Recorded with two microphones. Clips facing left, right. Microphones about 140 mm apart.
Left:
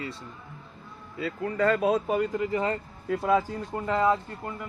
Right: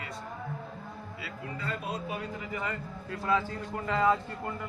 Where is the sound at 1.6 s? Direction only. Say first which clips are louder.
Left 14 dB; 60° left (ahead or behind); by 2.8 s 40° left (ahead or behind).